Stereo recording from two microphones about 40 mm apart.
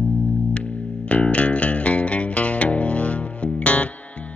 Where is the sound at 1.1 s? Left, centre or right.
Left.